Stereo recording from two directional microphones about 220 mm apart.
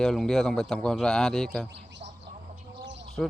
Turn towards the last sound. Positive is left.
turn(degrees=-55)  # may be behind; listen again after turning